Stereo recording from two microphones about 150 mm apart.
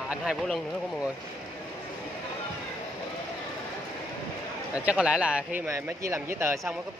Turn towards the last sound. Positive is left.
turn(degrees=-15)  # may be behind; listen again after turning